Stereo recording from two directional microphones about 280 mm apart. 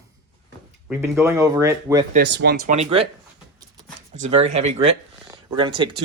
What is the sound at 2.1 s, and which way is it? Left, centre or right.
Speech, right.